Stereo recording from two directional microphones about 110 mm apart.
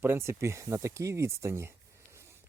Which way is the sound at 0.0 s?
20° right (ahead or behind).